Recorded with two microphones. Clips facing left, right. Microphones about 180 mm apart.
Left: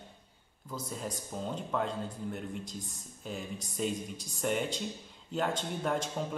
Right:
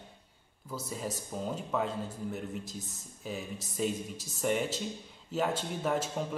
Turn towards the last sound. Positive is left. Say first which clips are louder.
# right 1 dB
turn(degrees=-5)  # may be behind; listen again after turning